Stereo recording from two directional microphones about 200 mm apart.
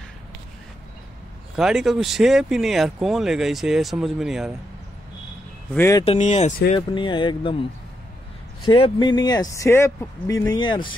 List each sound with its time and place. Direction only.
1.6 s speech: centre (ahead or behind)
5.8 s speech: 15° left (ahead or behind)
6.0 s speech: 35° left (ahead or behind)
6.7 s speech: 25° left (ahead or behind)
8.6 s speech: 25° left (ahead or behind)